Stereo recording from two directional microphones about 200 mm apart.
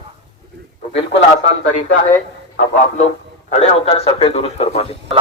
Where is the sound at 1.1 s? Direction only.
30° left (ahead or behind).